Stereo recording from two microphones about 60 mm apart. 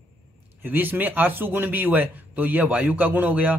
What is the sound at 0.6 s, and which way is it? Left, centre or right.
A man's voice, right.